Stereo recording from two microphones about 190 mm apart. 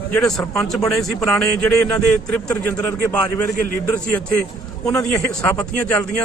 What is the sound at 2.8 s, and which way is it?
Speech, 20° left (ahead or behind).